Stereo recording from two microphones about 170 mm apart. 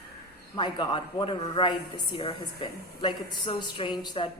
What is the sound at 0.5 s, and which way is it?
A woman's voice, 25° left (ahead or behind).